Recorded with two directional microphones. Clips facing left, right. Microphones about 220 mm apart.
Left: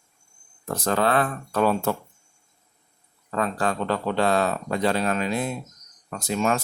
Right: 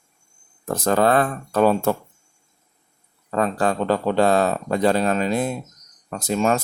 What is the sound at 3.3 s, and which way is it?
Speech, 40° right (ahead or behind).